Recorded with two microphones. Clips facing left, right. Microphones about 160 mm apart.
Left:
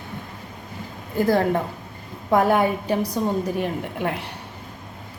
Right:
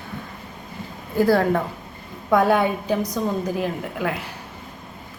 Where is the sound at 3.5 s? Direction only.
Centre (ahead or behind).